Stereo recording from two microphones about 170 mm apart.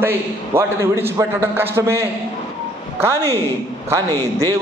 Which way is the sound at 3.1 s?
15° left (ahead or behind).